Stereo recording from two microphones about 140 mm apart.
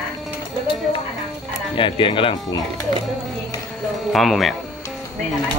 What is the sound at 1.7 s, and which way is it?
Speech, 35° left (ahead or behind).